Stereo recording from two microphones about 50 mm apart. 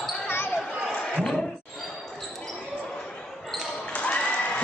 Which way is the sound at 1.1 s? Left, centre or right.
Centre.